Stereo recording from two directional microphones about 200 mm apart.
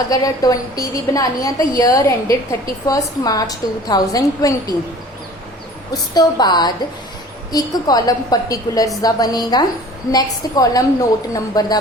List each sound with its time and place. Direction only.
0.1 s a woman's voice: 20° left (ahead or behind)
5.9 s a woman's voice: 20° left (ahead or behind)